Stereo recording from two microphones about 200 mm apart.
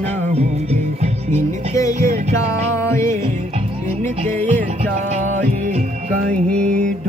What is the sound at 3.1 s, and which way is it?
Music, 35° right (ahead or behind).